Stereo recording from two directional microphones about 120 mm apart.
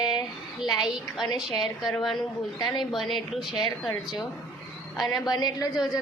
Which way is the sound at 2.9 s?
Centre (ahead or behind).